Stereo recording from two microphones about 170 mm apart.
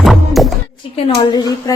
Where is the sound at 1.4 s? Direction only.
20° left (ahead or behind).